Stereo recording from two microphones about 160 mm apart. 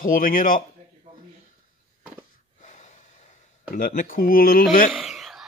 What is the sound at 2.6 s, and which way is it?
Gasp, 45° left (ahead or behind).